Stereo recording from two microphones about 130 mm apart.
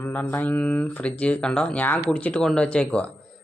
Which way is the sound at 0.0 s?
15° left (ahead or behind).